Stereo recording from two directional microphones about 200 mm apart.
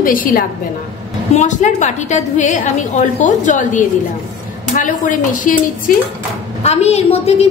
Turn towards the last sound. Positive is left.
turn(degrees=30)  # may be behind; listen again after turning